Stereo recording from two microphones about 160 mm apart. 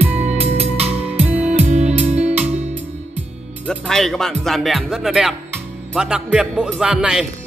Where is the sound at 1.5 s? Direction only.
45° right (ahead or behind).